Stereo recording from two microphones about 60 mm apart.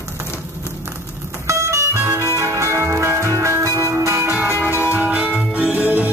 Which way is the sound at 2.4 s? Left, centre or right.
Right.